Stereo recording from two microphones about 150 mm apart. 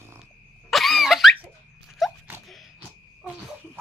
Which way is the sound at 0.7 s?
Centre (ahead or behind).